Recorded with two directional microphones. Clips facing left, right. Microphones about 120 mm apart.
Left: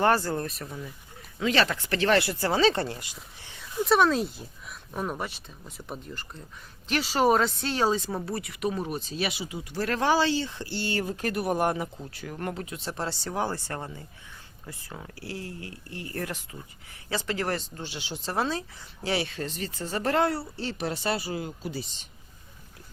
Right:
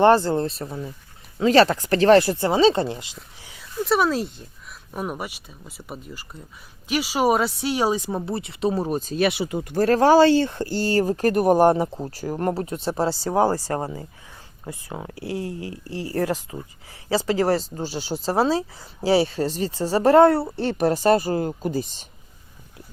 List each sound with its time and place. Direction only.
0.0 s speech: 25° right (ahead or behind)
2.4 s speech: 25° right (ahead or behind)
3.4 s a sound: 5° right (ahead or behind)
3.8 s speech: centre (ahead or behind); by 14.0 s 40° right (ahead or behind)
14.7 s speech: 25° right (ahead or behind)
20.2 s speech: 55° right (ahead or behind)